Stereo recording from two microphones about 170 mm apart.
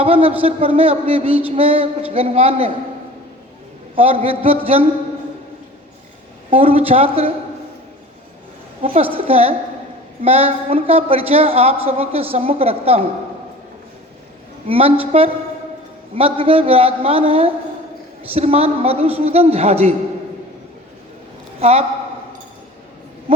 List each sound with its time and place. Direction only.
0.0 s a woman's voice: 35° right (ahead or behind)
3.9 s a woman's voice: 35° right (ahead or behind)
6.5 s a woman's voice: 35° right (ahead or behind)
8.8 s a woman's voice: 35° right (ahead or behind)
14.7 s a woman's voice: 35° right (ahead or behind)
21.6 s a woman's voice: 35° right (ahead or behind)